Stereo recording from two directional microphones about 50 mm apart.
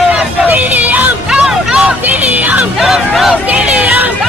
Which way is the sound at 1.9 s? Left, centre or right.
Right.